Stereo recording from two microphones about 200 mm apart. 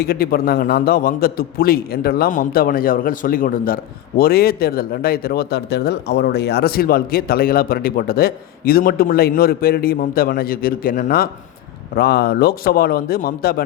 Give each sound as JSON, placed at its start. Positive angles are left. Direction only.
{"t": 0.0, "sound": "speech", "side_deg": 50}